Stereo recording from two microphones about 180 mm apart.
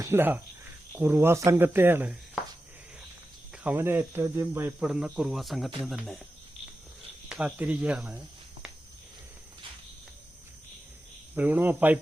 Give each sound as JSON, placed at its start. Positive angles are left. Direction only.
{"t": 0.0, "sound": "speech", "side_deg": -15}
{"t": 3.5, "sound": "speech", "side_deg": -5}
{"t": 7.3, "sound": "speech", "side_deg": -5}
{"t": 11.3, "sound": "speech", "side_deg": -10}